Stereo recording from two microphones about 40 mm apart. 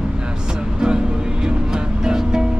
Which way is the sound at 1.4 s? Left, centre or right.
Centre.